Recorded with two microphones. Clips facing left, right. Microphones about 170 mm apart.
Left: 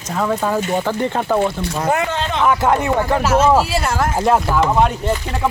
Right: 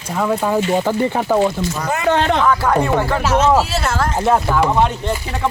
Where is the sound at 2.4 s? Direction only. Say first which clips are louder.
Even; 20° left (ahead or behind).